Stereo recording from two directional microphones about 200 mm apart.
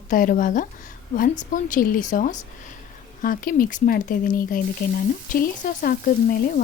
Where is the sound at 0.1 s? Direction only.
40° left (ahead or behind).